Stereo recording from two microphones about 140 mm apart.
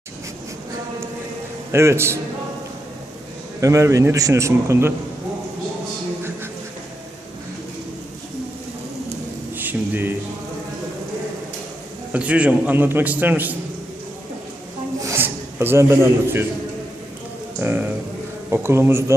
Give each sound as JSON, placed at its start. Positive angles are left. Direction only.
{"t": 1.7, "sound": "a man's voice", "side_deg": -20}
{"t": 3.6, "sound": "a man's voice", "side_deg": -25}
{"t": 9.6, "sound": "a sound", "side_deg": -15}
{"t": 12.1, "sound": "a man's voice", "side_deg": -10}
{"t": 15.0, "sound": "a man's voice", "side_deg": -15}
{"t": 17.6, "sound": "a man's voice", "side_deg": -15}